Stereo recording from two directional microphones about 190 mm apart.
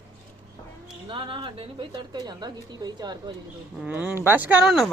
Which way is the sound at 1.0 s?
25° right (ahead or behind).